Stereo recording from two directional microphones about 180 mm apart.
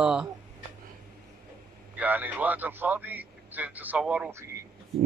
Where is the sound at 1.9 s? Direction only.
10° right (ahead or behind).